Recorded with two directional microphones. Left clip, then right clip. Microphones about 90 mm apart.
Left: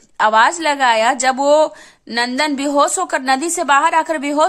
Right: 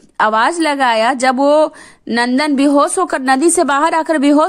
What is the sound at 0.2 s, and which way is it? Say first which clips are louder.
A woman's voice: even; 45° right (ahead or behind).